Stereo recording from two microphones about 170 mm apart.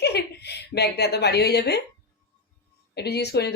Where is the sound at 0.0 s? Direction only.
75° left (ahead or behind).